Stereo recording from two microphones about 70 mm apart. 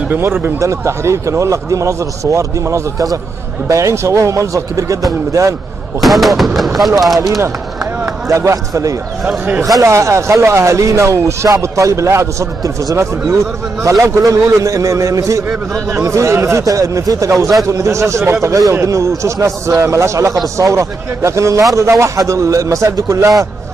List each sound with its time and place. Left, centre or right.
0.1 s speech: right
0.6 s a man's voice: right
5.9 s speech: centre
7.2 s a man's voice: right